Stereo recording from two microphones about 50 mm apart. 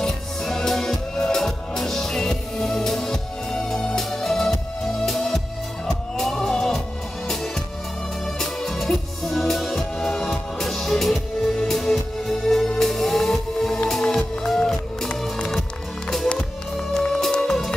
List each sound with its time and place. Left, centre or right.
0.0 s music: centre
8.4 s music: centre